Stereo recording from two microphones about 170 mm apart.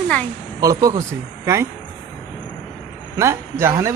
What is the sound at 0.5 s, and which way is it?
Speech, 20° right (ahead or behind).